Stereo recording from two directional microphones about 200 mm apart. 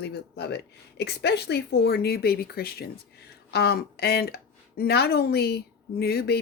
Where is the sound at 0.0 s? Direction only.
55° left (ahead or behind).